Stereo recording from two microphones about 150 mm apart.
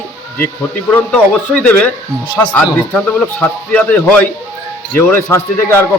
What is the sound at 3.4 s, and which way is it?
A man's voice, 10° left (ahead or behind).